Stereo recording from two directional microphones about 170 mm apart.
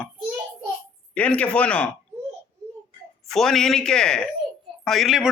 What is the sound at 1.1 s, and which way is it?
Speech, 10° left (ahead or behind).